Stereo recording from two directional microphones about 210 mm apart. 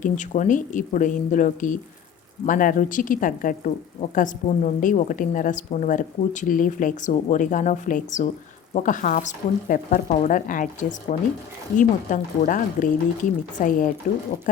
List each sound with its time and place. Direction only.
0.0 s a woman's voice: 35° left (ahead or behind)